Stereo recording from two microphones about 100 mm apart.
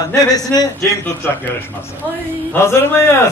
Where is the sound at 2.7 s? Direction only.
25° left (ahead or behind).